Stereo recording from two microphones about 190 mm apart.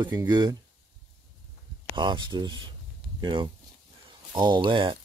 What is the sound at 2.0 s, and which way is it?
Speech, 25° right (ahead or behind).